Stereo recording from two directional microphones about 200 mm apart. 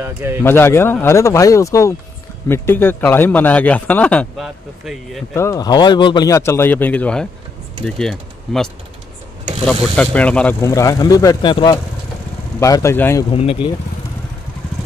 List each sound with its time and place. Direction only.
0.0 s a man's voice: 10° right (ahead or behind)
0.4 s speech: 10° left (ahead or behind)
5.3 s speech: 15° left (ahead or behind)
9.7 s speech: 5° left (ahead or behind)
13.3 s speech: 30° left (ahead or behind)